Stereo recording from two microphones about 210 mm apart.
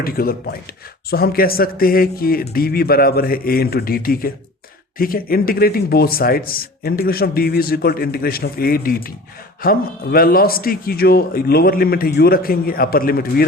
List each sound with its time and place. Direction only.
0.0 s speech: 45° left (ahead or behind)